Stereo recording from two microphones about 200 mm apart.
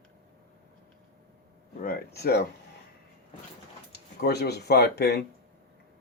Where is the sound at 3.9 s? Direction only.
55° left (ahead or behind).